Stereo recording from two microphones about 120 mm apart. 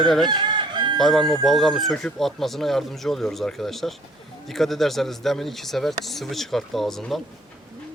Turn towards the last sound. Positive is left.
turn(degrees=5)  # may be behind; listen again after turning